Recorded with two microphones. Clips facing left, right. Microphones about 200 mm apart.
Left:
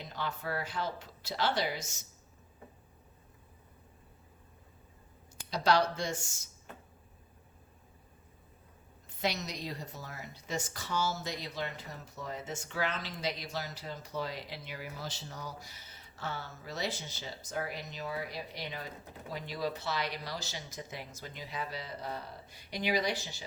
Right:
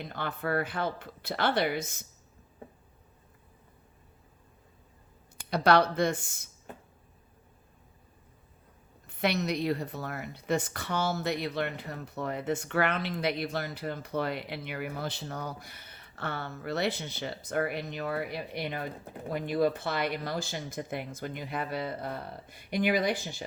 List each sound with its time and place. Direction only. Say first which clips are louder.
0.0 s speech: right 4 dB; 55° right (ahead or behind)
5.5 s speech: right 5 dB; 60° right (ahead or behind)
9.0 s speech: right 6 dB; 60° right (ahead or behind)